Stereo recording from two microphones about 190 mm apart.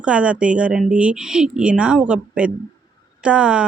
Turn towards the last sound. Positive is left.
turn(degrees=-5)  # may be behind; listen again after turning